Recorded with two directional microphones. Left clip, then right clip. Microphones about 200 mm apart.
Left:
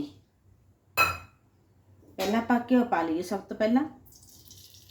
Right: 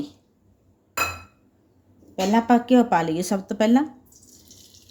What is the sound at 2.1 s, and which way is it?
Speech, 55° right (ahead or behind).